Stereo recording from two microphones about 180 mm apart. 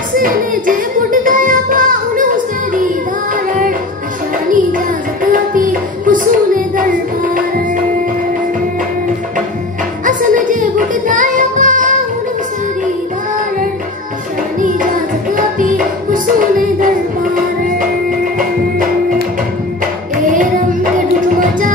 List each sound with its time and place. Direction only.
0.1 s singing: 50° right (ahead or behind)
4.5 s music: 50° right (ahead or behind)
10.0 s music: 45° right (ahead or behind)
14.6 s music: 45° right (ahead or behind)
21.4 s music: 45° right (ahead or behind)